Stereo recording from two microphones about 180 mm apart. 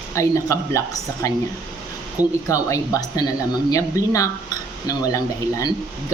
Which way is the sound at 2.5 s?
20° left (ahead or behind).